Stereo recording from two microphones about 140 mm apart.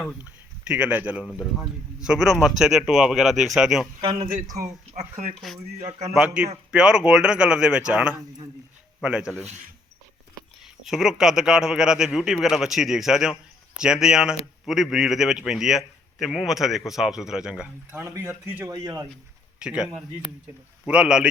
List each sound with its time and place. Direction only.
0.7 s a man's voice: 10° right (ahead or behind)
4.0 s a man's voice: 35° right (ahead or behind)
4.9 s speech: 50° right (ahead or behind)
6.1 s speech: 10° right (ahead or behind)
9.4 s speech: 55° right (ahead or behind)
10.8 s a man's voice: 5° right (ahead or behind)
18.7 s speech: 25° right (ahead or behind)
19.5 s speech: 5° right (ahead or behind)